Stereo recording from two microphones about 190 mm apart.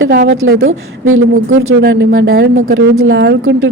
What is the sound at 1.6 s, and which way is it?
Speech, 80° right.